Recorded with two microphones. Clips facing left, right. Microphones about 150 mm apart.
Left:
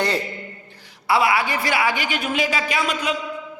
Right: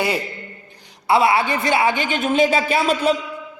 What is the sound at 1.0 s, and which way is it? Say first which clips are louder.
A man's voice: right 3 dB; 25° right (ahead or behind).